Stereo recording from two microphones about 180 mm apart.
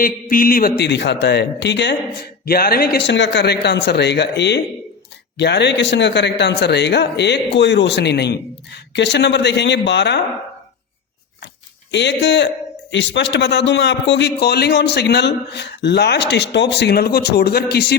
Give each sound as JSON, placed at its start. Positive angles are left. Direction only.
{"t": 0.0, "sound": "a man's voice", "side_deg": 50}
{"t": 2.5, "sound": "a man's voice", "side_deg": 55}
{"t": 11.9, "sound": "a man's voice", "side_deg": 75}